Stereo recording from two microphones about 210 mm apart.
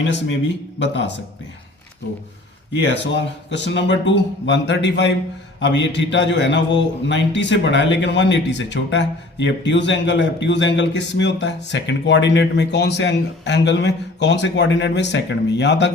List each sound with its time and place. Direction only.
0.8 s a man's voice: 60° left (ahead or behind)
2.7 s a man's voice: 60° left (ahead or behind)